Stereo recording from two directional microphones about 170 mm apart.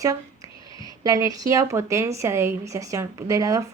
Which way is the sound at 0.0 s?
20° right (ahead or behind).